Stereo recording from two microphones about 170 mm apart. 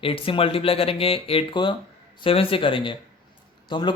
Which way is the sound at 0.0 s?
30° left (ahead or behind).